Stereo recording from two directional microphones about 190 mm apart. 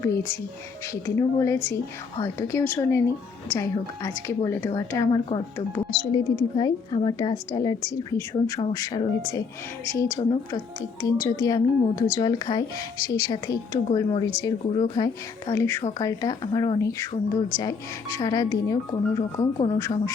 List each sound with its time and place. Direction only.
0.0 s a woman's voice: 15° left (ahead or behind)